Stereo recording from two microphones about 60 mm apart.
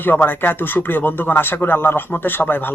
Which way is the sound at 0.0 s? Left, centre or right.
Left.